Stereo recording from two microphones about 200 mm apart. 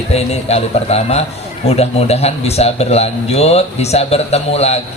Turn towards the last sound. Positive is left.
turn(degrees=30)  # may be behind; listen again after turning